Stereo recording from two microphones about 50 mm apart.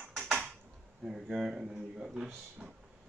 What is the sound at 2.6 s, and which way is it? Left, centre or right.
Vehicle, right.